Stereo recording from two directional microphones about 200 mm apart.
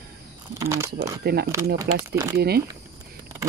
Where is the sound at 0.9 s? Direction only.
55° right (ahead or behind).